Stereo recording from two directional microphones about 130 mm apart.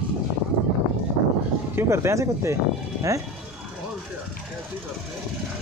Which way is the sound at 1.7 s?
20° right (ahead or behind).